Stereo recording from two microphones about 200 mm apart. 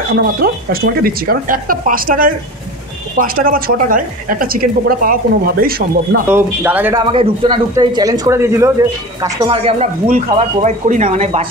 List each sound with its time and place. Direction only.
0.1 s a woman's voice: 50° right (ahead or behind)
6.2 s speech: 10° right (ahead or behind)
7.1 s speech: 25° right (ahead or behind)